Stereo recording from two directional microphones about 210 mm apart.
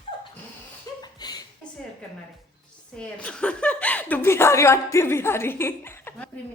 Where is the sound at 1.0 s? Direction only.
20° left (ahead or behind).